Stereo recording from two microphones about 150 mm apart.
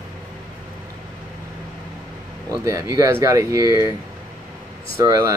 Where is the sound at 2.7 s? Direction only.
25° right (ahead or behind).